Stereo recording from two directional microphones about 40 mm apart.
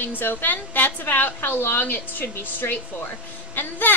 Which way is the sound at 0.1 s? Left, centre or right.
Left.